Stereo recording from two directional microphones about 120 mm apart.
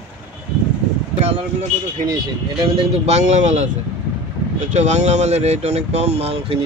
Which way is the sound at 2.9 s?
65° right (ahead or behind).